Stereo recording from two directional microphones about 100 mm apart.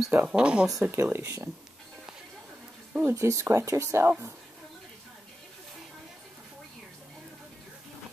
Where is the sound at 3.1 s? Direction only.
30° right (ahead or behind).